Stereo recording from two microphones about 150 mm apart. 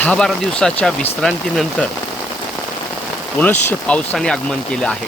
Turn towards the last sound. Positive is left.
turn(degrees=5)  # may be behind; listen again after turning